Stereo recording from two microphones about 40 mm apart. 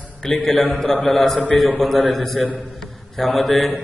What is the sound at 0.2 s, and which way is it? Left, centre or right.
Speech, centre.